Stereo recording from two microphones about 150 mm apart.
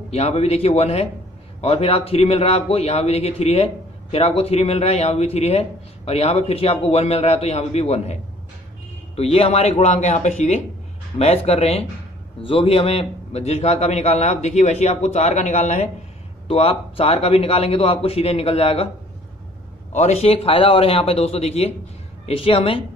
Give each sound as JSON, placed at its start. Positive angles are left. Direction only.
{"t": 0.1, "sound": "a man's voice", "side_deg": 45}
{"t": 16.4, "sound": "a man's voice", "side_deg": 40}
{"t": 19.9, "sound": "a man's voice", "side_deg": 45}